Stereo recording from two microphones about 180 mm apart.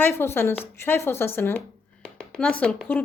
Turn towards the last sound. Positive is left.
turn(degrees=5)  # may be behind; listen again after turning